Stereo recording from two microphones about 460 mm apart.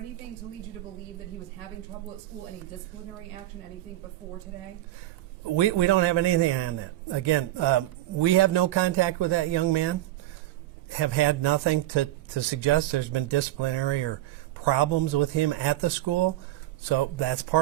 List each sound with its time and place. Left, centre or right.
5.5 s speech: right
10.9 s speech: right